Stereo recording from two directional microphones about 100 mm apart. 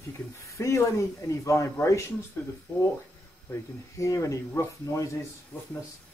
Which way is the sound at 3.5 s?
35° left (ahead or behind).